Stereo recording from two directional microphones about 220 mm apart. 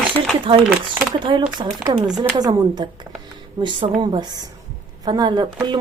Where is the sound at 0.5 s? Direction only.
25° right (ahead or behind).